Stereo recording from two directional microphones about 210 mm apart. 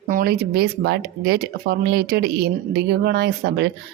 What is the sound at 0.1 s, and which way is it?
Speech, 45° right (ahead or behind).